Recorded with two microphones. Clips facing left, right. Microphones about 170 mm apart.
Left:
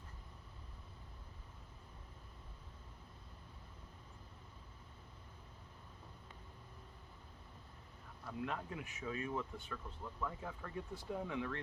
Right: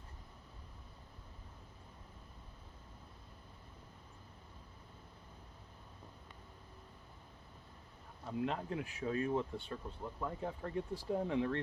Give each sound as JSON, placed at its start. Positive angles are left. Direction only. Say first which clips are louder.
{"t": 8.2, "sound": "speech", "louder": "right 5 dB", "side_deg": -25}